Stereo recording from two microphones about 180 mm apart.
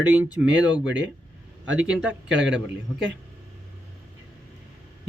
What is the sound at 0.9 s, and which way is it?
Speech, 80° right.